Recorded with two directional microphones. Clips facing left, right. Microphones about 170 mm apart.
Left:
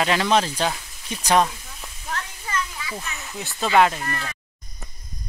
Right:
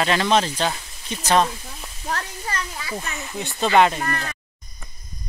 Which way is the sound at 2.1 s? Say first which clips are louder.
Right 3 dB; 40° right (ahead or behind).